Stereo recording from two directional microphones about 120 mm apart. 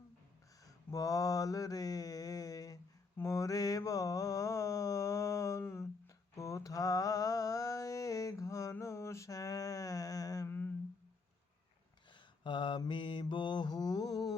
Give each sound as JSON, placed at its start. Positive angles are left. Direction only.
{"t": 0.6, "sound": "mantra", "side_deg": 30}
{"t": 10.5, "sound": "humming", "side_deg": 15}
{"t": 12.1, "sound": "mantra", "side_deg": 40}